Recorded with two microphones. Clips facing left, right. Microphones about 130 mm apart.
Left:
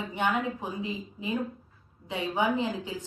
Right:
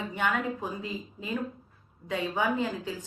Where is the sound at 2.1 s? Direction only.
20° left (ahead or behind).